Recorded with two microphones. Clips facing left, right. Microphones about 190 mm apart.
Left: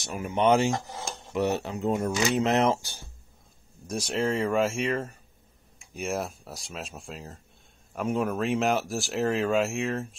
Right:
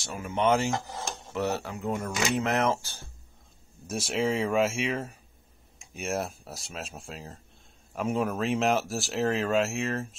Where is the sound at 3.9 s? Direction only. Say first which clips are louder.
Even; 5° right (ahead or behind).